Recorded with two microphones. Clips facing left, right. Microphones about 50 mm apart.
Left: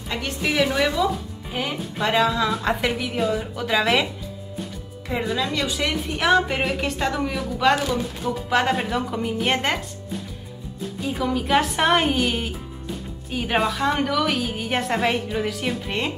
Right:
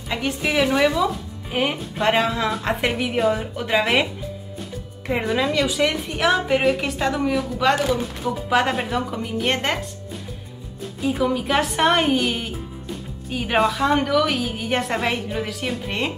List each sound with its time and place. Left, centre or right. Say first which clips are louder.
0.1 s a woman's voice: right 2 dB; centre
1.5 s music: right 5 dB; right
2.0 s a woman's voice: even; right
5.0 s speech: right 3 dB; right
5.5 s a woman's voice: right 4 dB; centre
11.0 s a woman's voice: right 3 dB; centre